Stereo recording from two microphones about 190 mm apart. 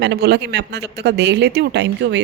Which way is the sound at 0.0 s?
60° right (ahead or behind).